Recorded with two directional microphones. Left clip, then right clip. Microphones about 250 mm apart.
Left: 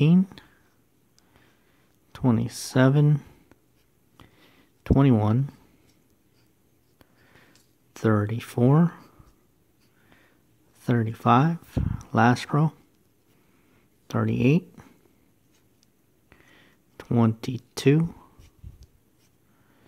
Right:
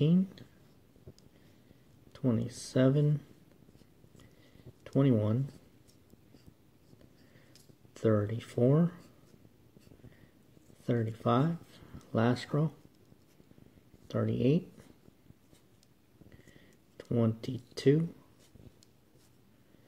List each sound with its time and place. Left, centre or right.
0.0 s a sound: left
2.1 s speech: left
4.8 s speech: left
7.9 s speech: left
10.8 s speech: left
14.0 s speech: left
16.3 s a sound: left